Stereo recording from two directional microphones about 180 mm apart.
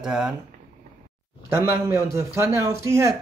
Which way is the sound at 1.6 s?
15° right (ahead or behind).